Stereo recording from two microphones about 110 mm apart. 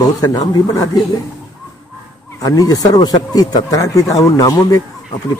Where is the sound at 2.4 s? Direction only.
35° left (ahead or behind).